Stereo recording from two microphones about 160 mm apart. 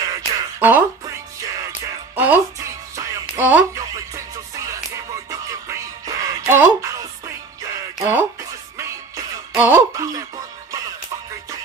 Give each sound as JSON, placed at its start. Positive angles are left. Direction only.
{"t": 0.0, "sound": "a sound", "side_deg": -20}
{"t": 0.6, "sound": "speech", "side_deg": -10}
{"t": 2.1, "sound": "speech", "side_deg": -10}
{"t": 3.0, "sound": "music", "side_deg": -10}
{"t": 4.6, "sound": "music", "side_deg": -20}